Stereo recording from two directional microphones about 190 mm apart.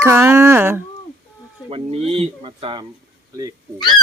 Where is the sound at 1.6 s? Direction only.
30° right (ahead or behind).